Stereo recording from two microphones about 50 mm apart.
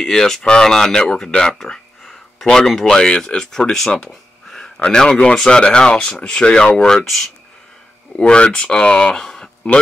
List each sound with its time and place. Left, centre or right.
0.0 s speech: centre
1.3 s a sound: centre
2.4 s speech: centre
4.1 s a sound: centre
4.7 s speech: centre
7.1 s speech: centre
8.2 s speech: left